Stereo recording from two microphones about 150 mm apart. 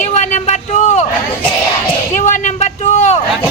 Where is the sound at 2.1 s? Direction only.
50° left (ahead or behind).